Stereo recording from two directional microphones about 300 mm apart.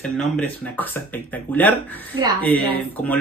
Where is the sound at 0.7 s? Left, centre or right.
Centre.